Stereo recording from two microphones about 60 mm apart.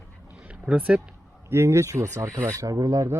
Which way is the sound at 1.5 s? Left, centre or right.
Right.